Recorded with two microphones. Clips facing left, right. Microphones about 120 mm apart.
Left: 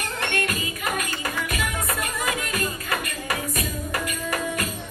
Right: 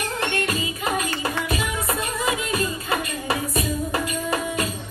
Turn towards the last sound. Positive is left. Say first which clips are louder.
# right 2 dB
turn(degrees=-25)  # may be behind; listen again after turning